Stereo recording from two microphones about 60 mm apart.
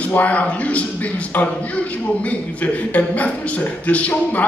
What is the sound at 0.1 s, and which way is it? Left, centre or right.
Speech, left.